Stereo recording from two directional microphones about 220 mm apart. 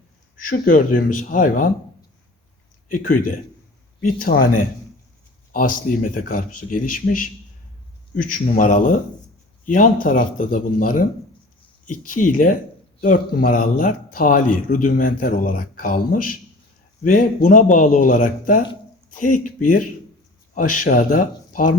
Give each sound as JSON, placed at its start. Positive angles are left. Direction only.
{"t": 0.4, "sound": "a man's voice", "side_deg": 40}
{"t": 2.9, "sound": "a man's voice", "side_deg": 40}
{"t": 5.5, "sound": "a man's voice", "side_deg": 40}
{"t": 20.5, "sound": "speech", "side_deg": 35}